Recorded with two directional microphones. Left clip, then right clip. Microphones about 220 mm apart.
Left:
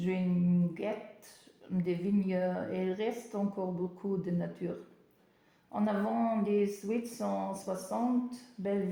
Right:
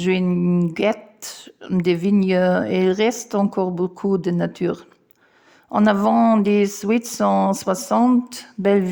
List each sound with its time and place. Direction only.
0.0 s speech: 40° right (ahead or behind)